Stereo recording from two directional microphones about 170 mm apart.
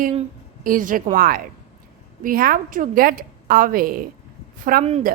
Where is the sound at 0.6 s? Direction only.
50° right (ahead or behind).